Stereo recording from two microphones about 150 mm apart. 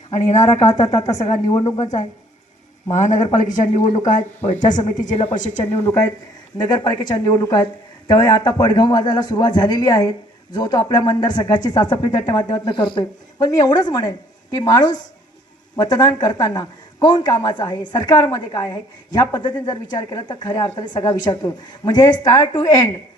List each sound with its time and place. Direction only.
0.1 s a man's voice: 50° left (ahead or behind)
0.4 s a woman's voice: 25° left (ahead or behind)
1.8 s a man's voice: 50° left (ahead or behind)
4.8 s speech: 30° left (ahead or behind)
5.0 s speech: 50° left (ahead or behind)
6.6 s a woman's voice: 25° left (ahead or behind)